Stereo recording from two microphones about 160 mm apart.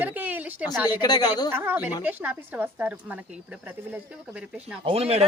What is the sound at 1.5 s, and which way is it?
A woman's voice, 15° right (ahead or behind).